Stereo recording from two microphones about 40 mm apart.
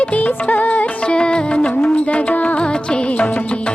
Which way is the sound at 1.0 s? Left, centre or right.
Left.